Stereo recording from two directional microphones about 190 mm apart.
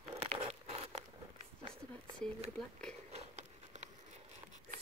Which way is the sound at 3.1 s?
35° right (ahead or behind).